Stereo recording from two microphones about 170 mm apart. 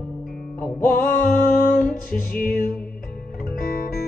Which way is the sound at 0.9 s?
55° left (ahead or behind).